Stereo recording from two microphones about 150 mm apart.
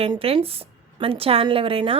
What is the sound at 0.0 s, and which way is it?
A woman's voice, 40° right (ahead or behind).